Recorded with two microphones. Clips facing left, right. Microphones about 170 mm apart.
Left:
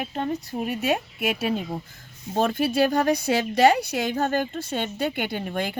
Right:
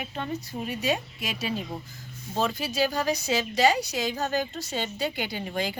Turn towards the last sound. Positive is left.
turn(degrees=55)  # may be behind; listen again after turning